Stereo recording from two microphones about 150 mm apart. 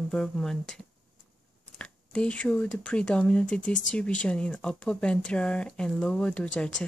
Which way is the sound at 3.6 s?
60° left (ahead or behind).